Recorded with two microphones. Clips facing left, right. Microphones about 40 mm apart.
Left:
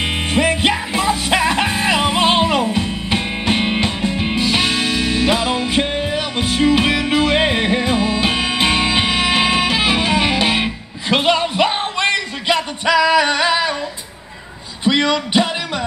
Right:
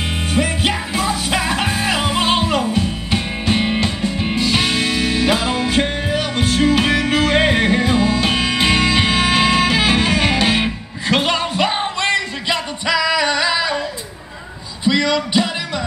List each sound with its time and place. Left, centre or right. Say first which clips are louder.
0.0 s music: left 2 dB; left
4.4 s music: even; centre
5.7 s music: even; centre
15.0 s music: left 1 dB; left